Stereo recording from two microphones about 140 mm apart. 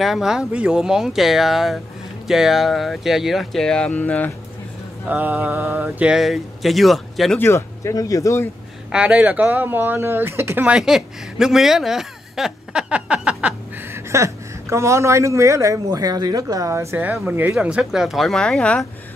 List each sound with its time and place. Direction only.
0.0 s speech: centre (ahead or behind)
5.0 s speech: 10° right (ahead or behind)
7.3 s speech: 20° left (ahead or behind)
8.9 s speech: 10° right (ahead or behind)